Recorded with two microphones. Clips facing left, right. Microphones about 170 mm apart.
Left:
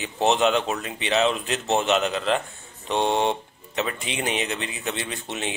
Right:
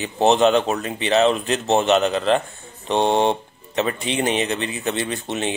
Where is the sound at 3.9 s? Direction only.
Centre (ahead or behind).